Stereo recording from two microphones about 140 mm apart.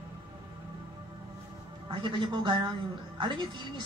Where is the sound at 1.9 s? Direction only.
35° right (ahead or behind).